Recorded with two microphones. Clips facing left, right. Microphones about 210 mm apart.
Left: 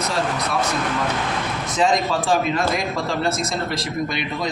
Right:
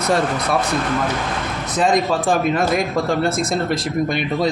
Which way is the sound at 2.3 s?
50° right (ahead or behind).